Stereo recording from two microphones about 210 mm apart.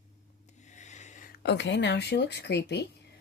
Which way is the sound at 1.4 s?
55° left (ahead or behind).